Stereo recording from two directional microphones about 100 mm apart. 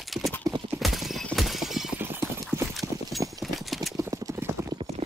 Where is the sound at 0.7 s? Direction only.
Centre (ahead or behind).